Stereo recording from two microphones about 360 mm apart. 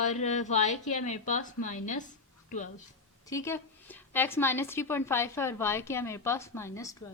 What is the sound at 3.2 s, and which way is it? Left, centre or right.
A woman's voice, centre.